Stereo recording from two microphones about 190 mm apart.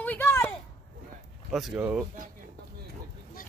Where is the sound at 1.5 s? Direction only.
5° right (ahead or behind).